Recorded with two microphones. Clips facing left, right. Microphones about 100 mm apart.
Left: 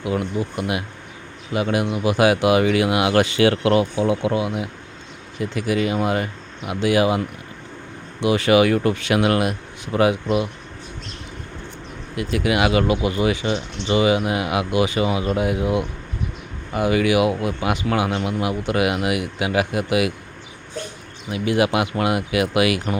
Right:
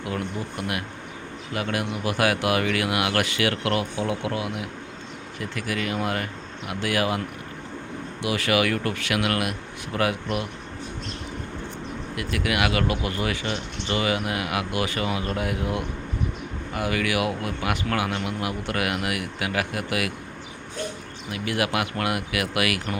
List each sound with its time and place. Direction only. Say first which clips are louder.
0.0 s speech: left 6 dB; 15° left (ahead or behind)
8.2 s speech: left 7 dB; 25° left (ahead or behind)
12.1 s speech: left 6 dB; 25° left (ahead or behind)
21.2 s speech: left 7 dB; 20° left (ahead or behind)